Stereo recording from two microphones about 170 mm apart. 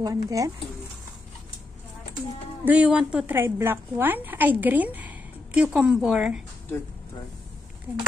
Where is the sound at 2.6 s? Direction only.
10° right (ahead or behind).